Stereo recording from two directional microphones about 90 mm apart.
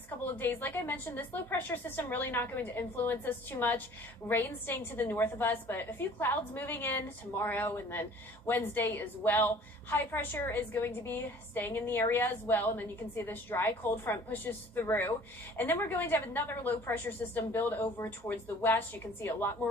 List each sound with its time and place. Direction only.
0.3 s a woman's voice: 20° left (ahead or behind)